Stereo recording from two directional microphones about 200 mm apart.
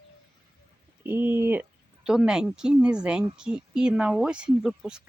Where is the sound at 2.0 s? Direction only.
5° right (ahead or behind).